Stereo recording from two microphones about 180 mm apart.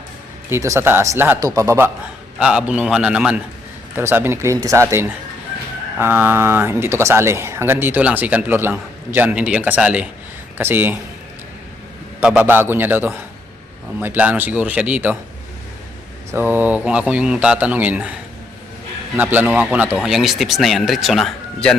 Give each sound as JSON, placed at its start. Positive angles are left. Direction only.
{"t": 0.5, "sound": "speech", "side_deg": -15}
{"t": 2.4, "sound": "speech", "side_deg": -5}
{"t": 12.2, "sound": "speech", "side_deg": -5}
{"t": 16.3, "sound": "speech", "side_deg": -10}
{"t": 19.1, "sound": "speech", "side_deg": -10}